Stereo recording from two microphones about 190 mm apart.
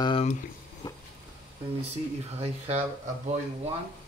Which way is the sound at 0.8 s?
25° left (ahead or behind).